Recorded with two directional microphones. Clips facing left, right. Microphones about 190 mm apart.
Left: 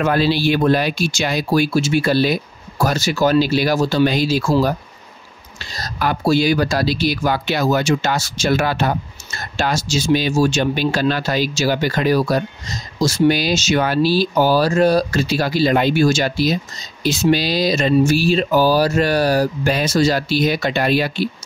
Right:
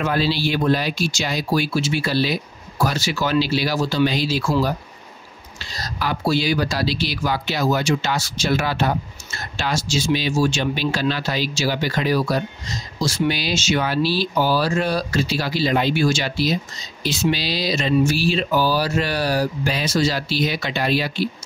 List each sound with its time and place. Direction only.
0.0 s speech: 55° left (ahead or behind)
5.8 s speech: 50° left (ahead or behind)